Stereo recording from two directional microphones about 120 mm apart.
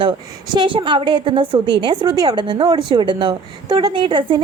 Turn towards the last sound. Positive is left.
turn(degrees=-45)  # may be behind; listen again after turning